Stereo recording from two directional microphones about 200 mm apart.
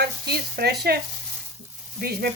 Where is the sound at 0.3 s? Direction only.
55° right (ahead or behind).